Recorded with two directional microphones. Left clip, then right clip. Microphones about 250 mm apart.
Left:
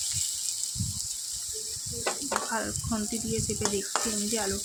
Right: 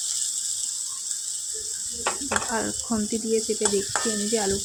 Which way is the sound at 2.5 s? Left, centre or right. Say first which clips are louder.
Right 4 dB; centre.